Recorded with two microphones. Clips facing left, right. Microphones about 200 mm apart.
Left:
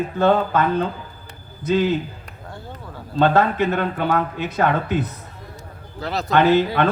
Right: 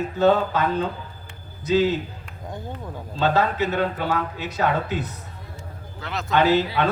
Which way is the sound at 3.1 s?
55° left (ahead or behind).